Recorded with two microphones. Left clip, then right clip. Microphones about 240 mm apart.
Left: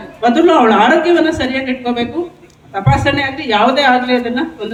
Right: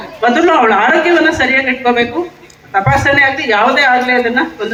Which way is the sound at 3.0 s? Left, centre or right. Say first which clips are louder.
Right 5 dB; centre.